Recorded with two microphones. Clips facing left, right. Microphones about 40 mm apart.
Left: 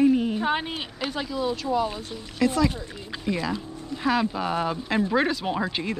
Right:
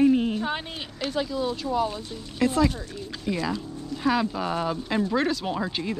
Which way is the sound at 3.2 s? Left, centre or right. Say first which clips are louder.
Even; centre.